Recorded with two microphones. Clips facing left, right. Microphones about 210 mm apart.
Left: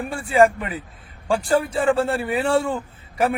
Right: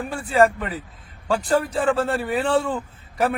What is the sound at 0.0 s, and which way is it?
A man's voice, 10° left (ahead or behind).